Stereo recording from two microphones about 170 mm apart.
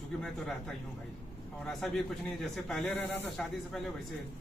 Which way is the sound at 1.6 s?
Centre (ahead or behind).